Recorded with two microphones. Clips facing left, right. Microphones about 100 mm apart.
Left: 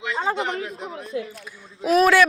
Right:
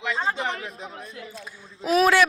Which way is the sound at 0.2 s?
70° left (ahead or behind).